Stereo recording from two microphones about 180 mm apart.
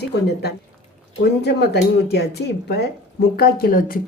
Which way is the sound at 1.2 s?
70° left (ahead or behind).